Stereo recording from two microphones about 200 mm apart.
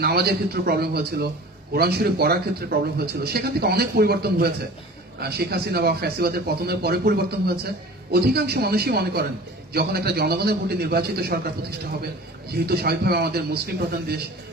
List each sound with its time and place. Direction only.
0.0 s a man's voice: 50° right (ahead or behind)